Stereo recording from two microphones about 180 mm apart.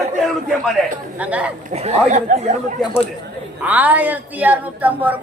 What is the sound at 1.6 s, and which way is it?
Speech, 40° right (ahead or behind).